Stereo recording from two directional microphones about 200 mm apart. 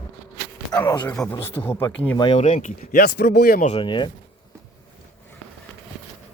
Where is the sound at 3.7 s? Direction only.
25° left (ahead or behind).